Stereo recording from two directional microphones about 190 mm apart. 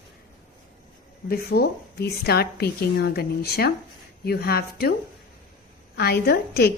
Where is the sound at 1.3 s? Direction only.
55° left (ahead or behind).